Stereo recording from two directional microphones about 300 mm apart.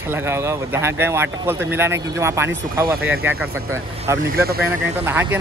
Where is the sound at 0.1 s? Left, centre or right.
Centre.